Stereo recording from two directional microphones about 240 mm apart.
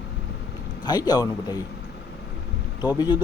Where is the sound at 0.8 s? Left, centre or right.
Centre.